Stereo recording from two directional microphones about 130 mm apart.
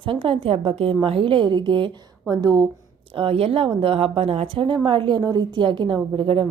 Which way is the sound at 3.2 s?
50° right (ahead or behind).